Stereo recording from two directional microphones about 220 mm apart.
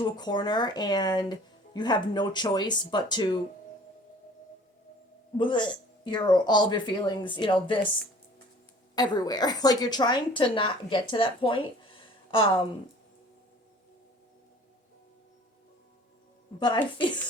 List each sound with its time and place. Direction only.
0.0 s a woman's voice: 20° left (ahead or behind)
5.4 s a woman's voice: 20° left (ahead or behind)
9.0 s a woman's voice: 20° left (ahead or behind)
16.6 s a woman's voice: 20° left (ahead or behind)